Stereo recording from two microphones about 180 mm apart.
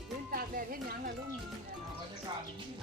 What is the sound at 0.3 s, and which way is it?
Music, 50° right (ahead or behind).